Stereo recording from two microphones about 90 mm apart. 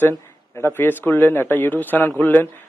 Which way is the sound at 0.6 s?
25° left (ahead or behind).